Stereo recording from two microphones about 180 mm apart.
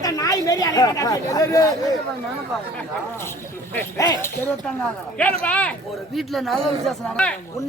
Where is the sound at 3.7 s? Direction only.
15° left (ahead or behind).